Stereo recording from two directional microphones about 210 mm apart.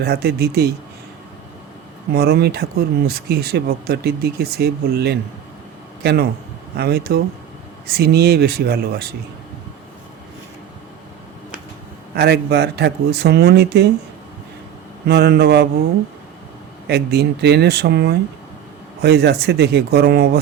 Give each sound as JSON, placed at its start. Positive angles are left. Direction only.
{"t": 0.0, "sound": "speech", "side_deg": -50}
{"t": 2.1, "sound": "a man's voice", "side_deg": -50}
{"t": 12.1, "sound": "speech", "side_deg": -50}
{"t": 15.0, "sound": "speech", "side_deg": -50}
{"t": 16.8, "sound": "speech", "side_deg": -50}